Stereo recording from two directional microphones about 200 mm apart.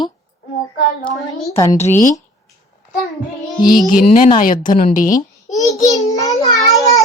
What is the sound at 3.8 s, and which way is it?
A woman's voice, 40° left (ahead or behind).